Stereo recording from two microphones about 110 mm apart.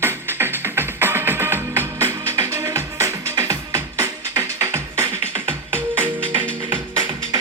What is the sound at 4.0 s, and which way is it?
Music, 20° right (ahead or behind).